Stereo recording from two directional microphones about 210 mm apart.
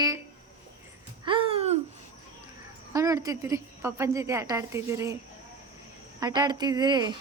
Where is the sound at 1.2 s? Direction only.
25° right (ahead or behind).